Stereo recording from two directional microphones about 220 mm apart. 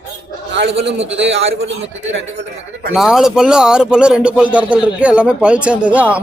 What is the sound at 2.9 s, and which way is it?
A man's voice, centre (ahead or behind).